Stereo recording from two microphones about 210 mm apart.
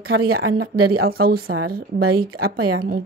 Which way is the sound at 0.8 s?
50° right (ahead or behind).